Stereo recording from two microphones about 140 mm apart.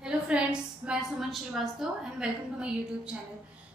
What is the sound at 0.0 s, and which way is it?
A woman's voice, 5° right (ahead or behind).